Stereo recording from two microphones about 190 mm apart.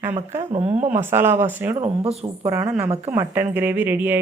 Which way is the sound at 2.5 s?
15° right (ahead or behind).